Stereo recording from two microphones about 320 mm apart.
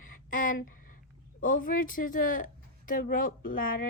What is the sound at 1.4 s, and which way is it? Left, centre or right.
A woman's voice, left.